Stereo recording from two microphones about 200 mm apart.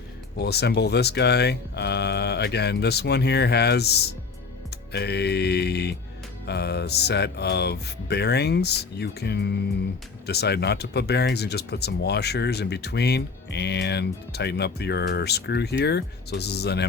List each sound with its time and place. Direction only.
0.3 s speech: 55° left (ahead or behind)